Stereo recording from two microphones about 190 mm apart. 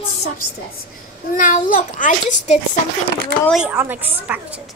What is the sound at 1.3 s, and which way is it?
A child's voice, 40° left (ahead or behind).